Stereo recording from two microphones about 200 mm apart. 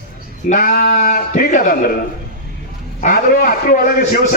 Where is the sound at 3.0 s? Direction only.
40° left (ahead or behind).